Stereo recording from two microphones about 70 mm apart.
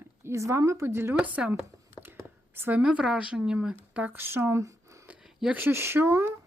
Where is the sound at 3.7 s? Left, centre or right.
Right.